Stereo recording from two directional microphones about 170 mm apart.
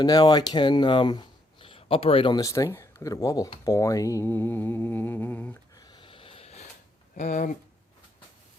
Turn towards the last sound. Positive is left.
turn(degrees=50)  # may be behind; listen again after turning